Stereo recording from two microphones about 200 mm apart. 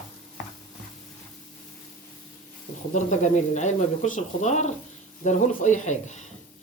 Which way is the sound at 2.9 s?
35° left (ahead or behind).